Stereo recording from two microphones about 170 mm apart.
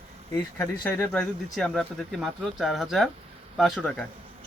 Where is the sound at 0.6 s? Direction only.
10° left (ahead or behind).